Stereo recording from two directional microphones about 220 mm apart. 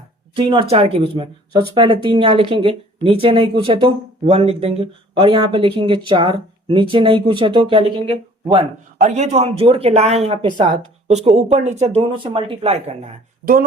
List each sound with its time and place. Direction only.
0.3 s speech: 25° right (ahead or behind)